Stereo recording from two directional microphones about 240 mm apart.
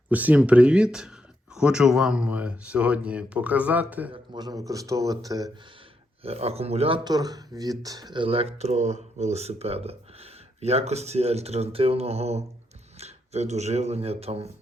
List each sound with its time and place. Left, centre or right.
0.1 s speech: centre
4.1 s a man's voice: centre
6.2 s speech: right